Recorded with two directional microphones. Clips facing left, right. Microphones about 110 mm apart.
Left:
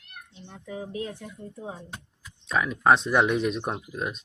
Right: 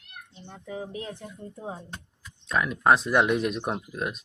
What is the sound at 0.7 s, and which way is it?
Speech, 25° right (ahead or behind).